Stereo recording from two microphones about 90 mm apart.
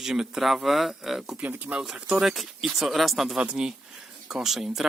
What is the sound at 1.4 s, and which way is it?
Speech, 15° right (ahead or behind).